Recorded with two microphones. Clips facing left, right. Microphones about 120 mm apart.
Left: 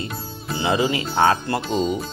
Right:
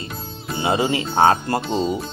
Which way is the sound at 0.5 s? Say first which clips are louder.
Right 1 dB; 30° right (ahead or behind).